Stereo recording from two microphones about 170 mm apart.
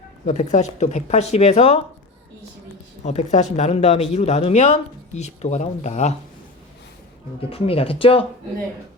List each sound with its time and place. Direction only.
0.3 s speech: 45° left (ahead or behind)
3.0 s speech: 40° left (ahead or behind)
7.5 s speech: 35° left (ahead or behind)